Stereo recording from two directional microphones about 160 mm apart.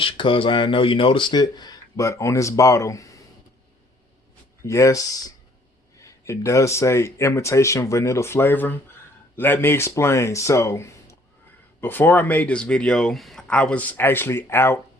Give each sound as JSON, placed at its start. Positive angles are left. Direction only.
{"t": 0.0, "sound": "speech", "side_deg": 30}
{"t": 4.6, "sound": "speech", "side_deg": 20}